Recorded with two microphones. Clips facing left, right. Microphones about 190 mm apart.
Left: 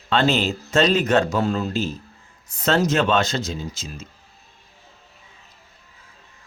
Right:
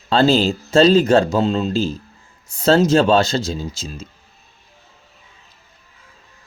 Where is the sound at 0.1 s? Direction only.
35° right (ahead or behind).